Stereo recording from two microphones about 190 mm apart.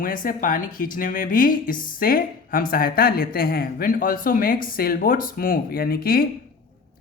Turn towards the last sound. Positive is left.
turn(degrees=55)  # may be behind; listen again after turning